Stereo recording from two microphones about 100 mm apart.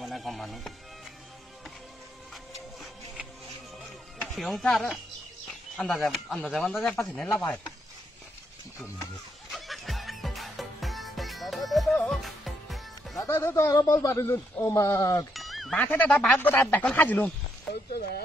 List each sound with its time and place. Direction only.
0.0 s music: centre (ahead or behind)
4.4 s speech: centre (ahead or behind)
9.5 s music: centre (ahead or behind)
13.2 s a man's voice: 25° left (ahead or behind)
15.3 s a sound: centre (ahead or behind)
15.7 s speech: 15° left (ahead or behind)